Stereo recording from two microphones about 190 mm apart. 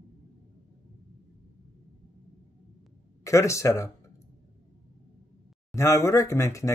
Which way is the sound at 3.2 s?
15° left (ahead or behind).